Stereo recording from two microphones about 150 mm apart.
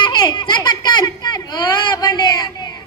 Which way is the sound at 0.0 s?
30° left (ahead or behind).